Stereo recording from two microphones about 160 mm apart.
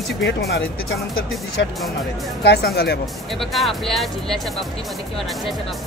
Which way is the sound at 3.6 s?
Centre (ahead or behind).